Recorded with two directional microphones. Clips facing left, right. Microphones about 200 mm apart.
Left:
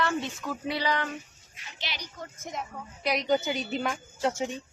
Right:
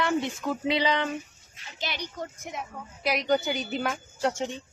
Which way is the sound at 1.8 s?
50° right (ahead or behind).